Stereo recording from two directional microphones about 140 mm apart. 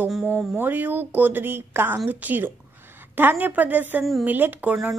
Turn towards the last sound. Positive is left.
turn(degrees=-15)  # may be behind; listen again after turning